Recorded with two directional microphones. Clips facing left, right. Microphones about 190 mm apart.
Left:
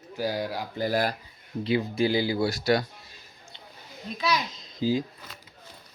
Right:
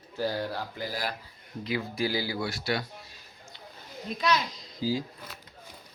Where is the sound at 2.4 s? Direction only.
40° left (ahead or behind).